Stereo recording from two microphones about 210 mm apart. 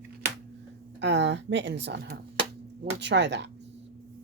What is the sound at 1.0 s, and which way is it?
Speech, 55° right (ahead or behind).